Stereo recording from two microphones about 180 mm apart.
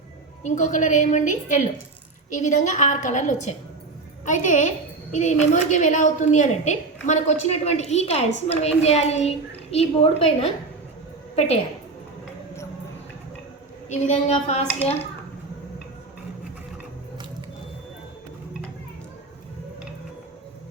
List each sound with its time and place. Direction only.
0.4 s a woman's voice: 45° left (ahead or behind)
13.9 s a woman's voice: 40° left (ahead or behind)